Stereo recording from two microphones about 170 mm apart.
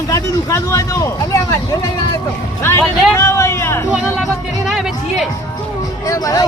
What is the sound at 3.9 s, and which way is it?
Speech, 5° right (ahead or behind).